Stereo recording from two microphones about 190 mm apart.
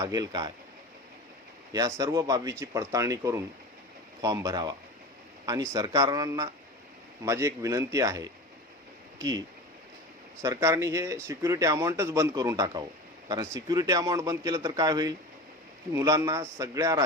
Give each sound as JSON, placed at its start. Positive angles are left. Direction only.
{"t": 0.0, "sound": "a man's voice", "side_deg": -20}
{"t": 1.7, "sound": "a man's voice", "side_deg": -20}
{"t": 10.4, "sound": "a man's voice", "side_deg": -15}